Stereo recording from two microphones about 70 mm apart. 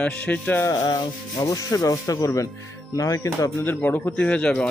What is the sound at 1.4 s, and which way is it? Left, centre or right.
Sanding, left.